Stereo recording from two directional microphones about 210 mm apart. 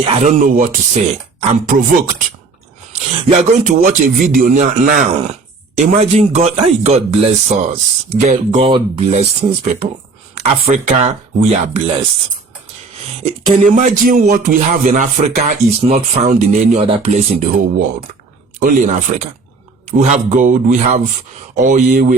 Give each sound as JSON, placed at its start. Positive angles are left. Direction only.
{"t": 0.2, "sound": "speech", "side_deg": -35}
{"t": 13.7, "sound": "speech", "side_deg": -35}